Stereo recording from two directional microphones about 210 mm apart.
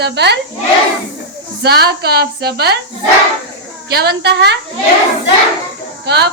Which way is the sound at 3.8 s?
50° right (ahead or behind).